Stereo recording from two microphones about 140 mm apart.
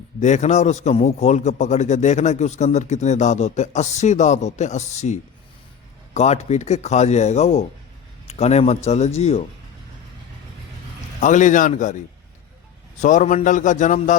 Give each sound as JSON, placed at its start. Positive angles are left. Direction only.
{"t": 0.2, "sound": "a man's voice", "side_deg": 55}
{"t": 11.2, "sound": "a man's voice", "side_deg": 60}
{"t": 13.0, "sound": "a man's voice", "side_deg": 60}